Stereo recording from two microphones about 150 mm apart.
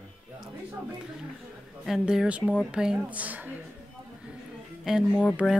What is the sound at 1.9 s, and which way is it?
A woman's voice, 5° right (ahead or behind).